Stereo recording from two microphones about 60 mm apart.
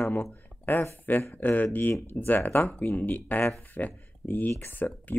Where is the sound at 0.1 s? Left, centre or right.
Left.